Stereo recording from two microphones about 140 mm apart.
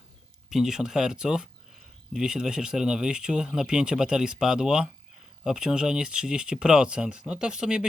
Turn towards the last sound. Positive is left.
turn(degrees=-5)  # may be behind; listen again after turning